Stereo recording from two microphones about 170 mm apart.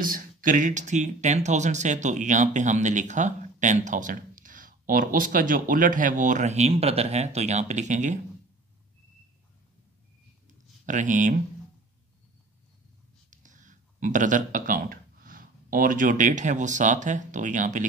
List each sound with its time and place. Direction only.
0.0 s speech: 55° right (ahead or behind)
10.9 s speech: 50° right (ahead or behind)
13.3 s speech: 50° right (ahead or behind)